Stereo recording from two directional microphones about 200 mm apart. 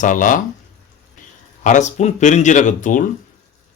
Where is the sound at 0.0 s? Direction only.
40° left (ahead or behind).